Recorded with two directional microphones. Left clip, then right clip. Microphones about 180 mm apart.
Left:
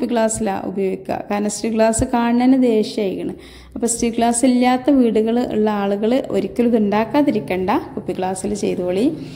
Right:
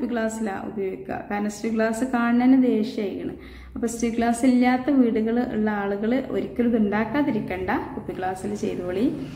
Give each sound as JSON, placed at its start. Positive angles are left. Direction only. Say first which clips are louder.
{"t": 0.0, "sound": "a woman's voice", "louder": "left 8 dB", "side_deg": 45}